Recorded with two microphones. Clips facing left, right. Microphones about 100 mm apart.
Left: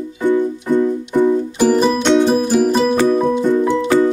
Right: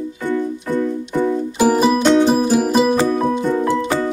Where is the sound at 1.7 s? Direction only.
5° right (ahead or behind).